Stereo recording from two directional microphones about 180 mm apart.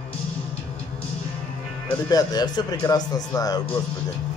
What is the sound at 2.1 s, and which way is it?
Speech, 20° left (ahead or behind).